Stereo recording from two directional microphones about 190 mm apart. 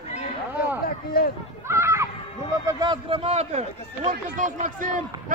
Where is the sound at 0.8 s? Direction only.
50° left (ahead or behind).